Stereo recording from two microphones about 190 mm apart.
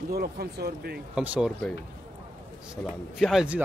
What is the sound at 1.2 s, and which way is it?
Speech, 5° right (ahead or behind).